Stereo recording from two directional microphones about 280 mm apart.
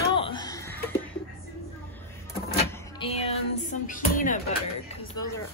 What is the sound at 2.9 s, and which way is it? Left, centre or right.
Speech, left.